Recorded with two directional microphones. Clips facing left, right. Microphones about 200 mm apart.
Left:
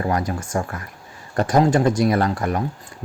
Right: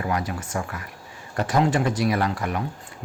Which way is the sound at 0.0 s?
40° left (ahead or behind).